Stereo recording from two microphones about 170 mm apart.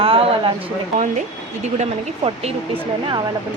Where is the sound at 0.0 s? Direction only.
30° right (ahead or behind).